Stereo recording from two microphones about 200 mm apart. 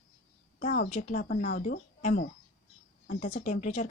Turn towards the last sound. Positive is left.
turn(degrees=35)  # may be behind; listen again after turning